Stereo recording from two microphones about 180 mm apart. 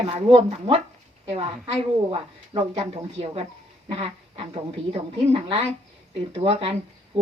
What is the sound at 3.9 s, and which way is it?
Speech, 30° right (ahead or behind).